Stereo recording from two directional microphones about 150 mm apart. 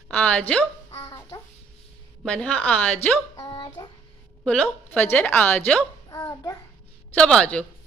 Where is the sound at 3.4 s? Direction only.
30° left (ahead or behind).